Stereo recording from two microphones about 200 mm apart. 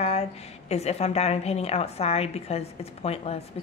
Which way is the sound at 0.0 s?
30° left (ahead or behind).